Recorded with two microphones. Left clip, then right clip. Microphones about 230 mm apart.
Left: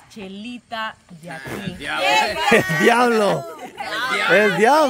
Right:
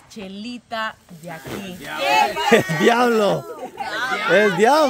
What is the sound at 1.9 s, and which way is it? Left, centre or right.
Speech, left.